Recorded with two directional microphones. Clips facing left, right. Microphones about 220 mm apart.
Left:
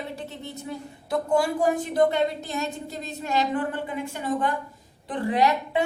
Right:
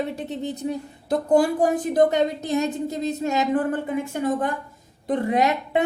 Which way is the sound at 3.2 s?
45° right (ahead or behind).